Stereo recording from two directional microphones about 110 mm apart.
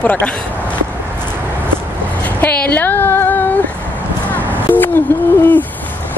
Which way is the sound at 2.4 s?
15° left (ahead or behind).